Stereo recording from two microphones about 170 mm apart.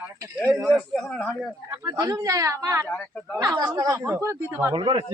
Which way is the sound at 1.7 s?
20° right (ahead or behind).